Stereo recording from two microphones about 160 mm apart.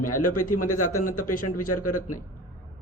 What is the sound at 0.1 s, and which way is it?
Speech, 55° left (ahead or behind).